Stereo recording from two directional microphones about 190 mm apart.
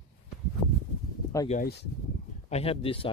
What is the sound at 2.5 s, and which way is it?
Speech, 30° left (ahead or behind).